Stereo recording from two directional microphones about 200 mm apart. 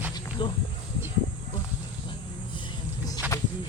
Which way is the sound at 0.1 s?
25° left (ahead or behind).